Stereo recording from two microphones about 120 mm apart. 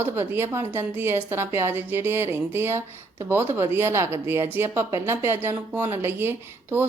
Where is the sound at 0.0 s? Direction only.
20° right (ahead or behind).